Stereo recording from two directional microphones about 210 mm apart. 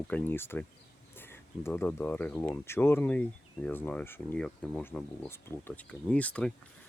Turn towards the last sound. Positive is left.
turn(degrees=5)  # may be behind; listen again after turning